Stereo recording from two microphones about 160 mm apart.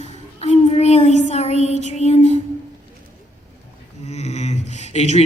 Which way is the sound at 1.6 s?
45° left (ahead or behind).